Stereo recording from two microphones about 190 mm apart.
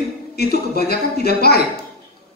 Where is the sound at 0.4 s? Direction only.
55° left (ahead or behind).